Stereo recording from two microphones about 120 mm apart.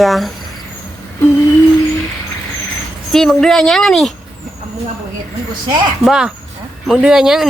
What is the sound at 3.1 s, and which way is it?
A woman's voice, 5° left (ahead or behind).